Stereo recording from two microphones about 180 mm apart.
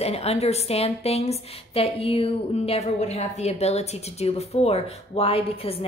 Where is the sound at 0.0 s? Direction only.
35° left (ahead or behind).